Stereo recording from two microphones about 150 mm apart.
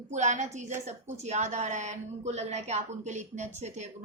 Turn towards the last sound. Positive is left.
turn(degrees=-50)  # may be behind; listen again after turning